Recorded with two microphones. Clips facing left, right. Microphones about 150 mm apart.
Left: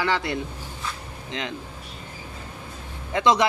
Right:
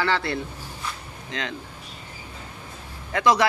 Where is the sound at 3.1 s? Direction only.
20° left (ahead or behind).